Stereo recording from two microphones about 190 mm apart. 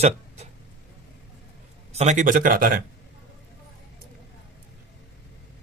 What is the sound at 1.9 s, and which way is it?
Speech, 40° right (ahead or behind).